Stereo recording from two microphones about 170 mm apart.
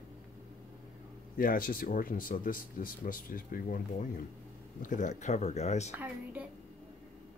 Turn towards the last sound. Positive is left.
turn(degrees=-10)  # may be behind; listen again after turning